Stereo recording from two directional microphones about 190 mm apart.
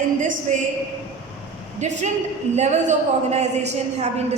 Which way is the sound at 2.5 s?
35° right (ahead or behind).